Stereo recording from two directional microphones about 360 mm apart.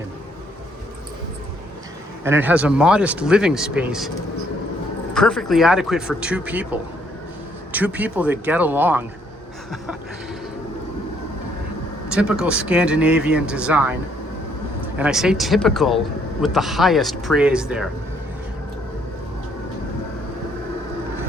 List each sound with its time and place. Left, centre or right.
2.2 s speech: centre
5.1 s speech: centre
12.1 s speech: centre
14.9 s speech: centre